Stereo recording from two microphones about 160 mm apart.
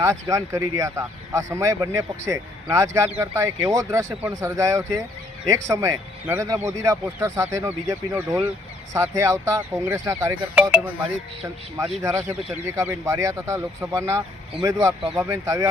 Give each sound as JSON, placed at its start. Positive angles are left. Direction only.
{"t": 0.0, "sound": "speech", "side_deg": -20}